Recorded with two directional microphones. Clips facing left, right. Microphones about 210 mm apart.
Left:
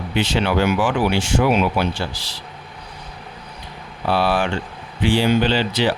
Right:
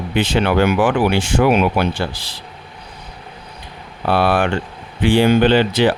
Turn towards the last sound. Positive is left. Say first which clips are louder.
# right 5 dB
turn(degrees=-55)  # may be behind; listen again after turning